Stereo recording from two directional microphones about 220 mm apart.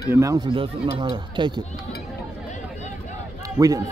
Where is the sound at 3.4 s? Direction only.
15° right (ahead or behind).